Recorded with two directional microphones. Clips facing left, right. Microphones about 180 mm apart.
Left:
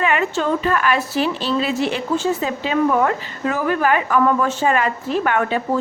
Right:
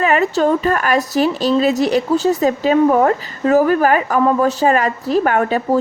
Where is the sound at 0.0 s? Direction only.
40° right (ahead or behind).